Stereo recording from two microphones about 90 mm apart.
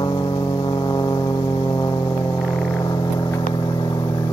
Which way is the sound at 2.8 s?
45° left (ahead or behind).